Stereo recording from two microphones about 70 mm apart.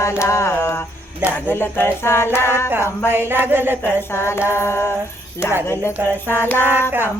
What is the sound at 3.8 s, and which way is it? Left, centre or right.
Speech, left.